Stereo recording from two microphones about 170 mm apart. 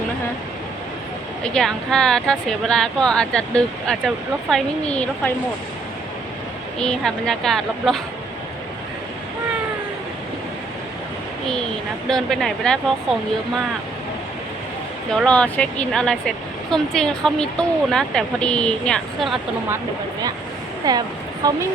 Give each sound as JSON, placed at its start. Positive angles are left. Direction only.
{"t": 1.5, "sound": "speech", "side_deg": 5}
{"t": 6.7, "sound": "speech", "side_deg": 5}
{"t": 12.0, "sound": "speech", "side_deg": 5}
{"t": 15.1, "sound": "speech", "side_deg": 5}
{"t": 20.9, "sound": "speech", "side_deg": -20}